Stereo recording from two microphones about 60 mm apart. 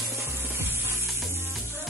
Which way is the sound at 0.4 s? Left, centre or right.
Right.